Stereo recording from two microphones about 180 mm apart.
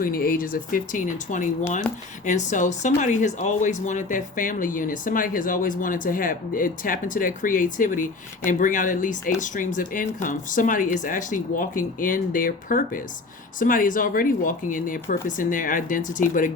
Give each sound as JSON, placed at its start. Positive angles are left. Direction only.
{"t": 0.0, "sound": "speech", "side_deg": 50}